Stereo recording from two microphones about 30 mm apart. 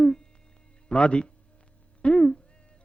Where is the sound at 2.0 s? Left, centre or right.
Left.